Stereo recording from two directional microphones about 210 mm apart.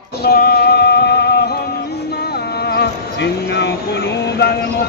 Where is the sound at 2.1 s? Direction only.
50° left (ahead or behind).